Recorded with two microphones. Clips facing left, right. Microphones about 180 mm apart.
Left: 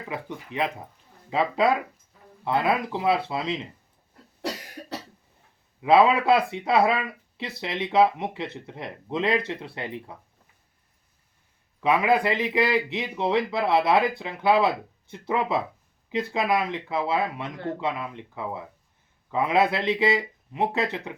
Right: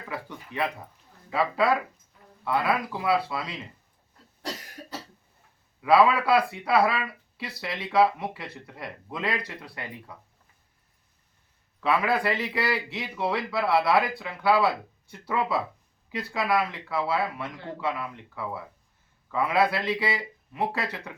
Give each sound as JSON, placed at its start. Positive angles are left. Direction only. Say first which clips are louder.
{"t": 0.1, "sound": "speech", "louder": "left 2 dB", "side_deg": 20}
{"t": 5.8, "sound": "speech", "louder": "left 2 dB", "side_deg": 20}
{"t": 11.8, "sound": "speech", "louder": "left 3 dB", "side_deg": 15}